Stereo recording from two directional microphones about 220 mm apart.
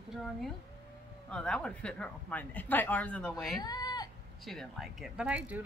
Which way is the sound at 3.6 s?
20° left (ahead or behind).